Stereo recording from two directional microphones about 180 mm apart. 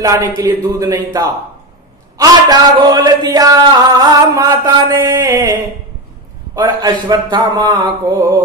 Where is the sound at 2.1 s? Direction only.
20° right (ahead or behind).